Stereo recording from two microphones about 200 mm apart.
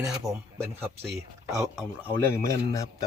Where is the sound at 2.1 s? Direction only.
10° left (ahead or behind).